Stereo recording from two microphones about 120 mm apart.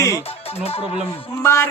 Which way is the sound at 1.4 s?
20° left (ahead or behind).